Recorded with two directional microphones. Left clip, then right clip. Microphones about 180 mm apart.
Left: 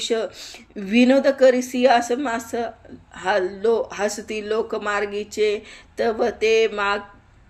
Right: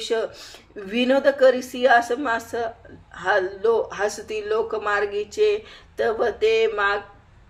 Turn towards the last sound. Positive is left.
turn(degrees=30)  # may be behind; listen again after turning